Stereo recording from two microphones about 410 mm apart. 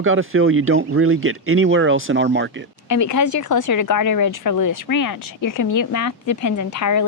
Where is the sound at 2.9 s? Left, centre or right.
Left.